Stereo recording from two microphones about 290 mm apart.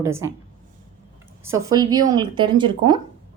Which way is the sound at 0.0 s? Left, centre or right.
Centre.